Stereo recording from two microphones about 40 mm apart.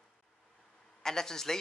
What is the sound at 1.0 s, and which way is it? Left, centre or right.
Speech, centre.